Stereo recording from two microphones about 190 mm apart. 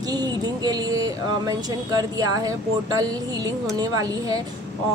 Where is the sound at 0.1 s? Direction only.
20° right (ahead or behind).